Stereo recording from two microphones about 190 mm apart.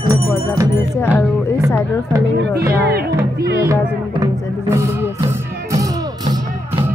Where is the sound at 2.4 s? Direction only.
60° right (ahead or behind).